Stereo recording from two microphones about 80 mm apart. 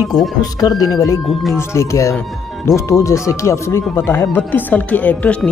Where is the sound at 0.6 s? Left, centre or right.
Left.